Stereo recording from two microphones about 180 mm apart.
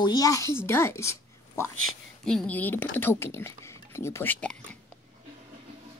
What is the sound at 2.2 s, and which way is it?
Speech, 5° left (ahead or behind).